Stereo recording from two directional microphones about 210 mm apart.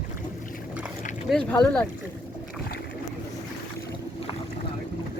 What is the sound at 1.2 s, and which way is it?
Speech, 5° left (ahead or behind).